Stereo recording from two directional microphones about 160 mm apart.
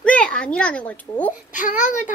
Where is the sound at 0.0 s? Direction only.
5° left (ahead or behind).